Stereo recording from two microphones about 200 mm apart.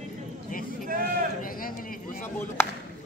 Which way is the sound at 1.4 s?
45° left (ahead or behind).